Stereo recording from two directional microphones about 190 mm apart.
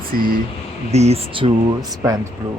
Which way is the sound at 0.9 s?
35° right (ahead or behind).